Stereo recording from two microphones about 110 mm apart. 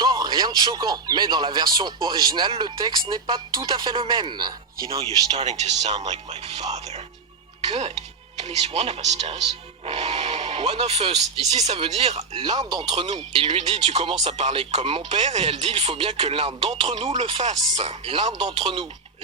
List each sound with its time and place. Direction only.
0.0 s speech: 40° right (ahead or behind)
5.4 s speech: 85° right
6.1 s speech: 70° right (ahead or behind)
7.7 s speech: 65° right (ahead or behind)
8.4 s speech: 75° right (ahead or behind)
12.4 s speech: 40° right (ahead or behind)
13.3 s speech: 65° right (ahead or behind)
14.4 s speech: 65° right (ahead or behind)
17.7 s speech: 50° right (ahead or behind)